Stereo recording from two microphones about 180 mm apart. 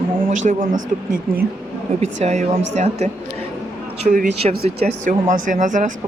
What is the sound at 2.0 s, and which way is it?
A woman's voice, 40° right (ahead or behind).